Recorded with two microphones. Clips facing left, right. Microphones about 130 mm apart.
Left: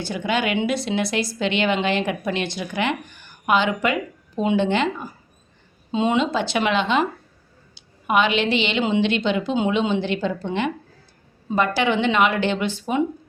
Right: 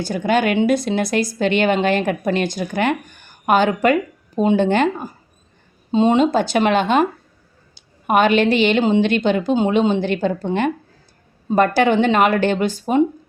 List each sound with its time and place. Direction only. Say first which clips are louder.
0.0 s a woman's voice: right 5 dB; 45° right (ahead or behind)
5.9 s a woman's voice: right 6 dB; 35° right (ahead or behind)